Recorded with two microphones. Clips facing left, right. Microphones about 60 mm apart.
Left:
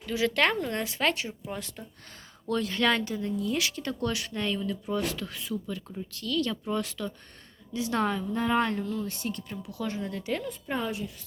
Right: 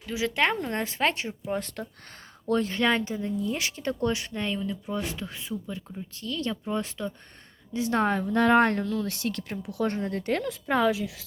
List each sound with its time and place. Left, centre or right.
0.0 s speech: centre
0.5 s speech: right
1.8 s speech: right
2.5 s speech: right
8.2 s speech: right
10.4 s a woman's voice: right